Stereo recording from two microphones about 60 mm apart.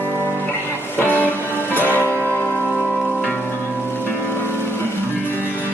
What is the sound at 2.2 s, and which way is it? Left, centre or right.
Music, centre.